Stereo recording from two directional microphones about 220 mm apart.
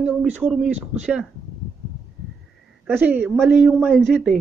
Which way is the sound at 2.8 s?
5° right (ahead or behind).